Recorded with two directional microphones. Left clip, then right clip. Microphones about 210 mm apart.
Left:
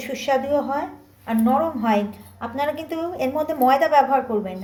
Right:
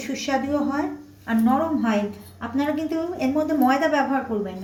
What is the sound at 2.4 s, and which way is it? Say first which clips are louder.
A woman's voice: left 1 dB; 45° left (ahead or behind).